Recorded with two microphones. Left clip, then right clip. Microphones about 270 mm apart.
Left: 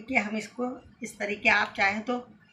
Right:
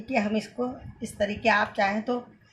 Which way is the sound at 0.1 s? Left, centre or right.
Right.